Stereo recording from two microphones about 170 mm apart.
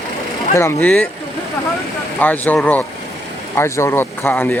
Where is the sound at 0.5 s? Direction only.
15° left (ahead or behind).